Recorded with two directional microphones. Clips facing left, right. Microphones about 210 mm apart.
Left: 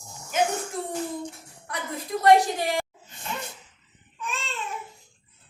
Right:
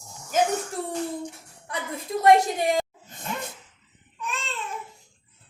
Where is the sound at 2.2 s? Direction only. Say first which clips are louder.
Even; 25° right (ahead or behind).